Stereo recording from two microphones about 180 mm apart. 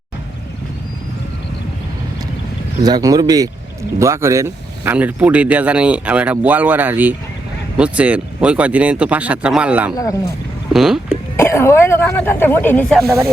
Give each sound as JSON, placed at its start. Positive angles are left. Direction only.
{"t": 2.8, "sound": "speech", "side_deg": -20}
{"t": 11.3, "sound": "speech", "side_deg": 15}